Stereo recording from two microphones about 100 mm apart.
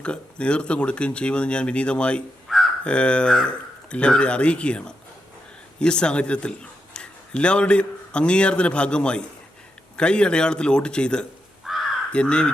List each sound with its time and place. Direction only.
0.0 s speech: 10° left (ahead or behind)
2.5 s crow: centre (ahead or behind)
2.8 s speech: 10° left (ahead or behind)
11.6 s crow: centre (ahead or behind)
12.1 s speech: 10° left (ahead or behind)